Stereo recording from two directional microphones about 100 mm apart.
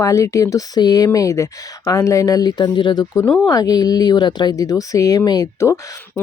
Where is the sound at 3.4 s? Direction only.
40° left (ahead or behind).